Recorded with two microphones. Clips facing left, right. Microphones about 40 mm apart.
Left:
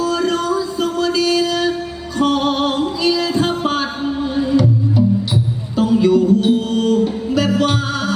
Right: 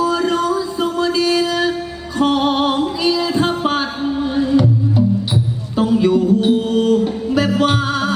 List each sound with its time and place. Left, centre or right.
0.0 s music: centre